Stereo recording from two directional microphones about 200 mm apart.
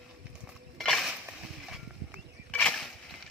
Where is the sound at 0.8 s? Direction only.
Centre (ahead or behind).